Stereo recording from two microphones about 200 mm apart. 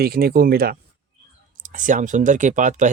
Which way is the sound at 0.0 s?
50° right (ahead or behind).